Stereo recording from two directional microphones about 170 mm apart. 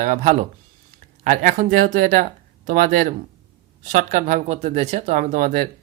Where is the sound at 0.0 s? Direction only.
45° right (ahead or behind).